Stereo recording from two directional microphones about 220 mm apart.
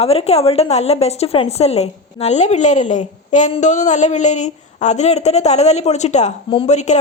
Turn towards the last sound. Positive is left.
turn(degrees=30)  # may be behind; listen again after turning